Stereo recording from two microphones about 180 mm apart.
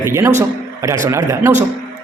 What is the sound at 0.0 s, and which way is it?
A man's voice, 15° right (ahead or behind).